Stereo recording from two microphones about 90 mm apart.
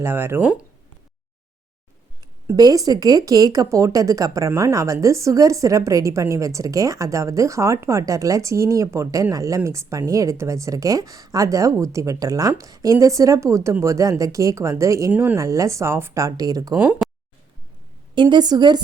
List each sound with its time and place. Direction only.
0.0 s speech: 25° right (ahead or behind)
2.6 s speech: 45° right (ahead or behind)
15.1 s speech: 20° right (ahead or behind)
15.4 s speech: 35° right (ahead or behind)
16.7 s speech: 20° right (ahead or behind)
18.1 s a woman's voice: 60° right (ahead or behind)